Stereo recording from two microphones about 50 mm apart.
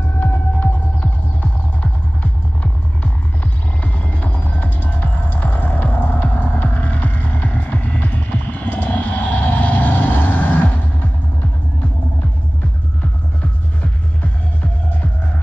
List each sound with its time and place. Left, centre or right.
0.2 s hum: left
3.8 s music: left
6.2 s throbbing: left